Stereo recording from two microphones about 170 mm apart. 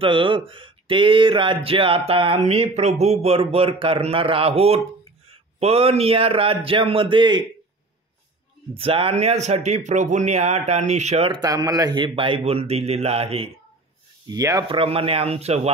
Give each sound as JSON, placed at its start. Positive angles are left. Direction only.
{"t": 0.0, "sound": "speech", "side_deg": -30}
{"t": 8.7, "sound": "speech", "side_deg": -35}
{"t": 14.3, "sound": "speech", "side_deg": -20}
{"t": 14.7, "sound": "speech", "side_deg": -35}